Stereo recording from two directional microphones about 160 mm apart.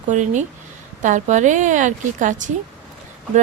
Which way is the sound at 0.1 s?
50° right (ahead or behind).